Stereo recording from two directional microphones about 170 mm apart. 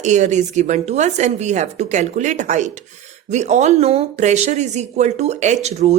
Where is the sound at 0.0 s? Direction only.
45° right (ahead or behind).